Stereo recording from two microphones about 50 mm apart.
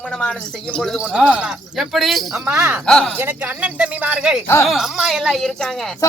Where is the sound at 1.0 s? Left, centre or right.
Right.